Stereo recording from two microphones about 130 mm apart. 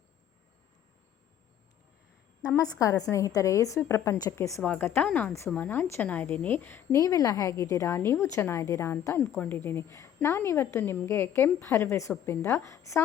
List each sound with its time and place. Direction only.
2.6 s a woman's voice: 25° left (ahead or behind)
4.6 s a woman's voice: 10° left (ahead or behind)
7.0 s a woman's voice: 25° left (ahead or behind)